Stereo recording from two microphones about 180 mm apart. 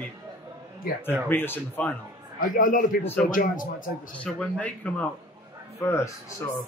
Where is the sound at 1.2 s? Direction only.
10° left (ahead or behind).